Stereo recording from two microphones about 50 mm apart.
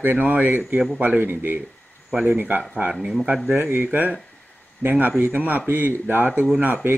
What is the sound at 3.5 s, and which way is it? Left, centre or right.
A man's voice, right.